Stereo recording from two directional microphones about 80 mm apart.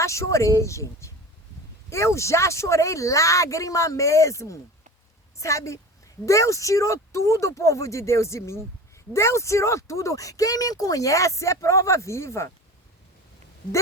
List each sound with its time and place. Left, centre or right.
0.0 s speech: left